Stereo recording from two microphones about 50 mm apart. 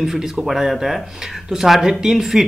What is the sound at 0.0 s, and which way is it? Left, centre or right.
Speech, centre.